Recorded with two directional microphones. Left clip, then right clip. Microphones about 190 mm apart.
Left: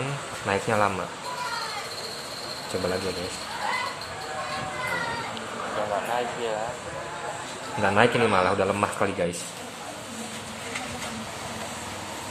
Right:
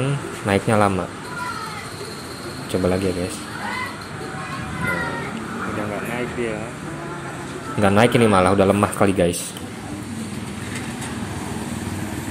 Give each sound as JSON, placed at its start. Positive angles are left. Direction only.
{"t": 0.5, "sound": "speech", "side_deg": -25}
{"t": 2.7, "sound": "speech", "side_deg": -20}
{"t": 7.8, "sound": "speech", "side_deg": -25}